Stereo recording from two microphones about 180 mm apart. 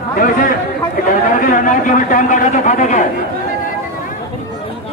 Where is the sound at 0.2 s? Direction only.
45° left (ahead or behind).